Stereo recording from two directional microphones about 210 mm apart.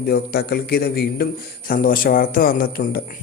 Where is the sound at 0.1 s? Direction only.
50° left (ahead or behind).